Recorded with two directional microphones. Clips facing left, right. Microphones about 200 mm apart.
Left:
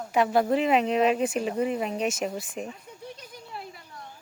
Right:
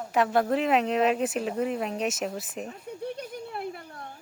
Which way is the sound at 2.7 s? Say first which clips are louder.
Right 6 dB; 60° right (ahead or behind).